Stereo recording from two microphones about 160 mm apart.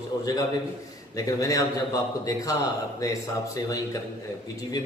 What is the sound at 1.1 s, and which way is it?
Speech, 20° left (ahead or behind).